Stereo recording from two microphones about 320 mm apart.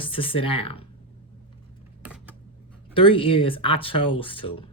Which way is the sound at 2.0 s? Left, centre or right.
Centre.